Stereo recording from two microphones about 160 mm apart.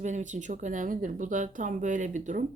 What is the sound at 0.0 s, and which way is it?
Speech, 50° right (ahead or behind).